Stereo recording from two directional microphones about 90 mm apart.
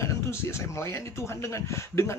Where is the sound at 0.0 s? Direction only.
30° left (ahead or behind).